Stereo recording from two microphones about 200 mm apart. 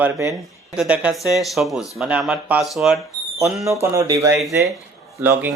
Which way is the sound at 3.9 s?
15° right (ahead or behind).